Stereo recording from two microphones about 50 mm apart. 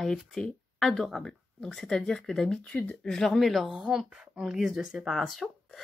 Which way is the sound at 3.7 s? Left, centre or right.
Centre.